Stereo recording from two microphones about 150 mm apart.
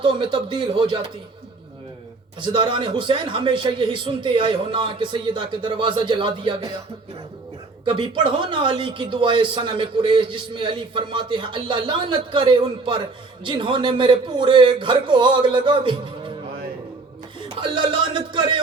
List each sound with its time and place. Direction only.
0.0 s speech: 30° right (ahead or behind)
2.4 s speech: 30° right (ahead or behind)
7.9 s speech: 35° right (ahead or behind)
17.5 s speech: 35° right (ahead or behind)